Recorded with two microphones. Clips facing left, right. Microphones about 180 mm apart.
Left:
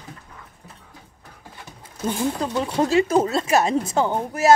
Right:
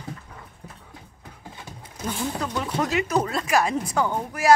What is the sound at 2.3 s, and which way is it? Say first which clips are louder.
Speech: left 4 dB; 30° left (ahead or behind).